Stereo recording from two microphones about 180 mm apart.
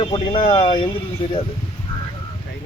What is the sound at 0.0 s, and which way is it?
Speech, 30° left (ahead or behind).